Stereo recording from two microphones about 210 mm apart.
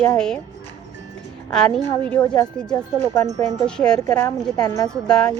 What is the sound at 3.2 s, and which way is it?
Speech, 15° right (ahead or behind).